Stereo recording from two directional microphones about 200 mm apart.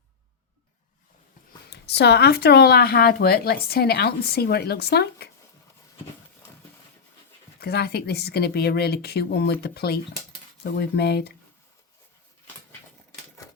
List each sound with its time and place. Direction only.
1.7 s speech: 55° left (ahead or behind)
7.6 s speech: 55° left (ahead or behind)